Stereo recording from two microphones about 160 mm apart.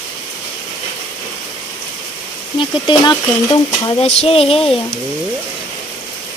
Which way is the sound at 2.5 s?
30° left (ahead or behind).